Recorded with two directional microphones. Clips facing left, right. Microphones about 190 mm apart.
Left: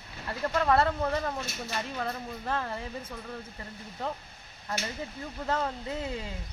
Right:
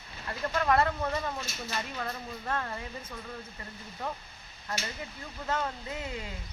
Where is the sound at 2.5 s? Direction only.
30° left (ahead or behind).